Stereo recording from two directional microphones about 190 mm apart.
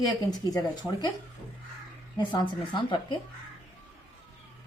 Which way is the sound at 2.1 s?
25° left (ahead or behind).